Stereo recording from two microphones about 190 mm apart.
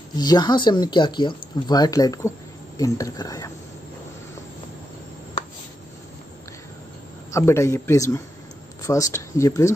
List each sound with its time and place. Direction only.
0.1 s speech: 20° left (ahead or behind)
7.2 s speech: 15° left (ahead or behind)